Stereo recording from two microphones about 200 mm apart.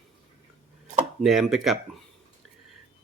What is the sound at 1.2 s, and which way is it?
Speech, centre (ahead or behind).